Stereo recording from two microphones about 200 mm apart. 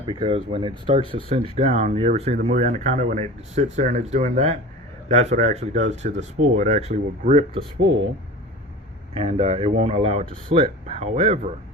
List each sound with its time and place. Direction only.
0.0 s speech: 25° right (ahead or behind)
9.1 s speech: 30° right (ahead or behind)